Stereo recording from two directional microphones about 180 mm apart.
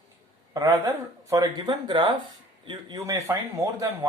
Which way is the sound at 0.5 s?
20° right (ahead or behind).